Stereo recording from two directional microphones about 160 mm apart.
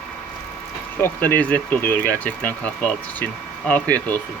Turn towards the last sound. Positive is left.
turn(degrees=10)  # may be behind; listen again after turning